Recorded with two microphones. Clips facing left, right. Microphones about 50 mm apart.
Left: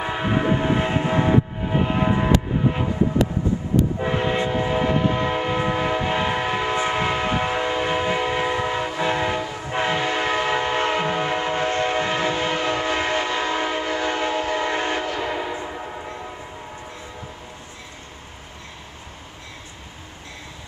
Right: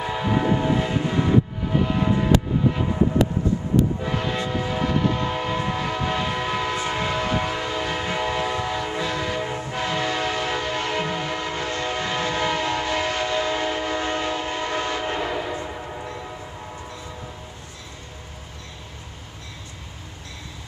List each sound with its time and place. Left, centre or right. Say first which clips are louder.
0.0 s train: left 1 dB; left
4.0 s train: left 4 dB; left
15.2 s train horn: left 1 dB; centre